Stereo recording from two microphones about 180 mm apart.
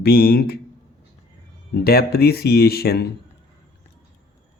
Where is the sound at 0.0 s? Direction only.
60° left (ahead or behind).